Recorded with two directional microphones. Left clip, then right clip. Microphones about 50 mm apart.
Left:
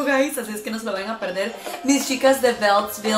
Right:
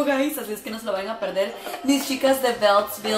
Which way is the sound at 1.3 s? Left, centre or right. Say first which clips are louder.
Right 1 dB; centre.